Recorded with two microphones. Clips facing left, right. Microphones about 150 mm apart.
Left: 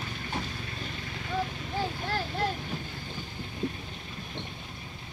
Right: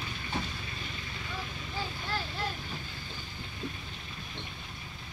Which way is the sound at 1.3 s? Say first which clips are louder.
Left 9 dB; 55° left (ahead or behind).